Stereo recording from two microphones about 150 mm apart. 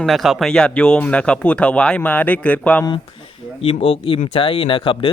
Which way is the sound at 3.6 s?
40° left (ahead or behind).